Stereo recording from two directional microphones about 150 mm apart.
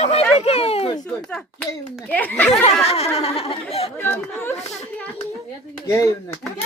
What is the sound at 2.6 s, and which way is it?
Speech, 45° left (ahead or behind).